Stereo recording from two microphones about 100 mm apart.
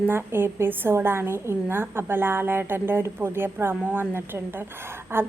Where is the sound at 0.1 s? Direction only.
20° right (ahead or behind).